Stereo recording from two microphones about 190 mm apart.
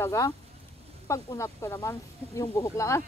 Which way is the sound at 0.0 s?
15° left (ahead or behind).